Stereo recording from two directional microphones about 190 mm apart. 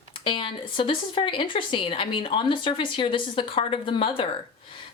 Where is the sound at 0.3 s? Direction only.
25° left (ahead or behind).